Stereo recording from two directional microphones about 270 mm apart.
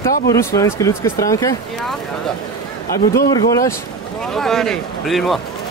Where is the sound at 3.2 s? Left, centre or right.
Centre.